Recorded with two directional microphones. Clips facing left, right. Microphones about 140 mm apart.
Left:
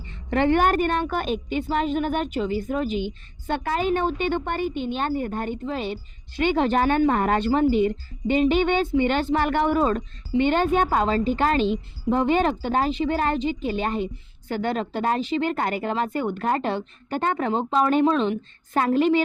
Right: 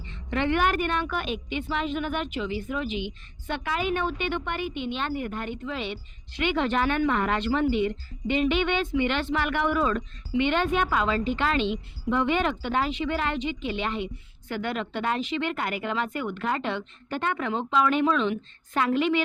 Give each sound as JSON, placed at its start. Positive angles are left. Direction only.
{"t": 0.3, "sound": "a woman's voice", "side_deg": 40}